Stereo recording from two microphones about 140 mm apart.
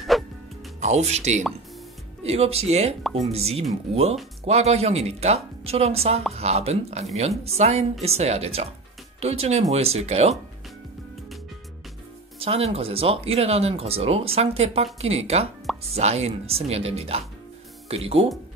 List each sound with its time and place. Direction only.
0.1 s music: centre (ahead or behind)
0.7 s speech: 55° right (ahead or behind)
3.0 s speech: centre (ahead or behind)
3.3 s speech: 45° right (ahead or behind)
12.4 s speech: 45° right (ahead or behind)